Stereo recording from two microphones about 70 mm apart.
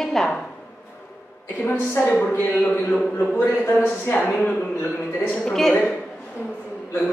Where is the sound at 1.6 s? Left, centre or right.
Left.